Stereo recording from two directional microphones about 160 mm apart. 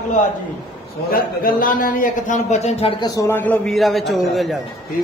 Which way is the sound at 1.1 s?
60° left (ahead or behind).